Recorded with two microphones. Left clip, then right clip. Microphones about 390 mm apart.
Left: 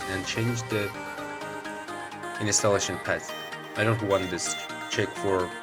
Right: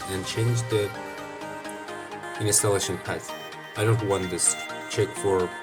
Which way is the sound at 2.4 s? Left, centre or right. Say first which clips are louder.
Even; right.